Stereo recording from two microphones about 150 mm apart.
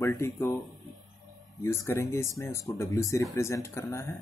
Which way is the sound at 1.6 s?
15° left (ahead or behind).